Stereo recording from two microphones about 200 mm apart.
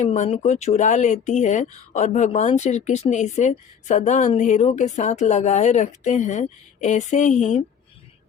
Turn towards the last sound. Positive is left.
turn(degrees=35)  # may be behind; listen again after turning